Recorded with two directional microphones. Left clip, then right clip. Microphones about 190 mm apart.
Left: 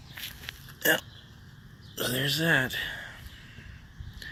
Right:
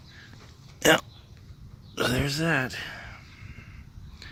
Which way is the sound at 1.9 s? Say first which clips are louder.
Right 4 dB; 30° right (ahead or behind).